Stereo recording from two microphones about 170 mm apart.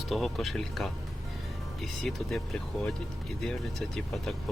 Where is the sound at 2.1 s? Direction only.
5° left (ahead or behind).